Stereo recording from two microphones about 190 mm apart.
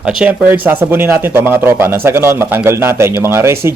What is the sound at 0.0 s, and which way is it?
Speech, 5° right (ahead or behind).